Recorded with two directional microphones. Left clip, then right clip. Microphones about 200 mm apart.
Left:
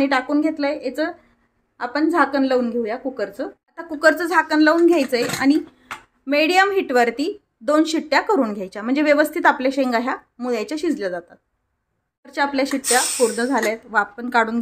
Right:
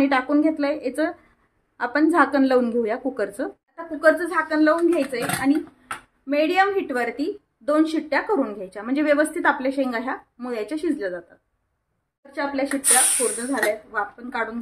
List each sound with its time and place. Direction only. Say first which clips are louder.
0.0 s a woman's voice: left 1 dB; 5° left (ahead or behind)
3.7 s a woman's voice: left 2 dB; 45° left (ahead or behind)
12.3 s speech: left 4 dB; 55° left (ahead or behind)